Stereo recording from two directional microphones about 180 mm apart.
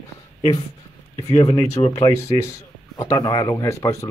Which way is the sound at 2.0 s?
20° left (ahead or behind).